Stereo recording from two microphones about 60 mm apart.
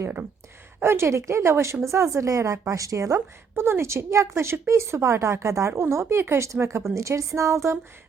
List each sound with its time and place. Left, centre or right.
0.8 s a woman's voice: right
3.2 s a woman's voice: right